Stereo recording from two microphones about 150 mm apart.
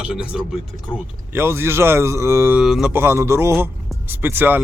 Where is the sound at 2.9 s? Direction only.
15° right (ahead or behind).